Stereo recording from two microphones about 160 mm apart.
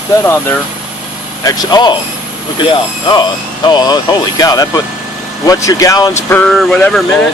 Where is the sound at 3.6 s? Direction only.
25° left (ahead or behind).